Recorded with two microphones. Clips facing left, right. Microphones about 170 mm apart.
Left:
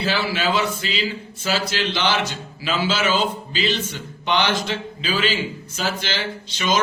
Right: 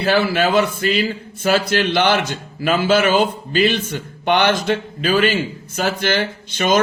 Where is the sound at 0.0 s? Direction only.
55° right (ahead or behind).